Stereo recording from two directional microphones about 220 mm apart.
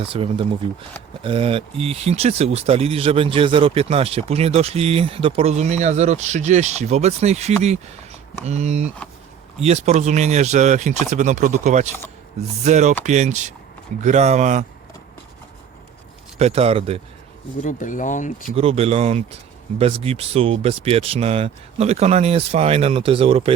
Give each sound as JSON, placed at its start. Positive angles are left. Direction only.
{"t": 0.0, "sound": "speech", "side_deg": -25}
{"t": 16.4, "sound": "speech", "side_deg": -25}
{"t": 17.6, "sound": "speech", "side_deg": 35}
{"t": 18.4, "sound": "speech", "side_deg": -25}